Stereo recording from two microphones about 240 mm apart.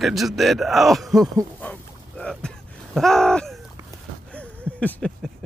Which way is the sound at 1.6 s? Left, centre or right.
Centre.